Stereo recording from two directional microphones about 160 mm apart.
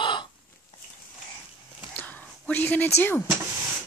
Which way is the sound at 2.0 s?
10° left (ahead or behind).